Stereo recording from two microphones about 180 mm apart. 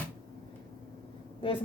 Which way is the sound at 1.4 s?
30° left (ahead or behind).